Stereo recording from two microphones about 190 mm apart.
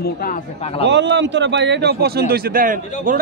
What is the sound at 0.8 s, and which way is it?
A man's voice, 70° right (ahead or behind).